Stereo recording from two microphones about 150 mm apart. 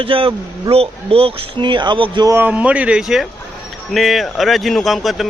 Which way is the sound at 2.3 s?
10° right (ahead or behind).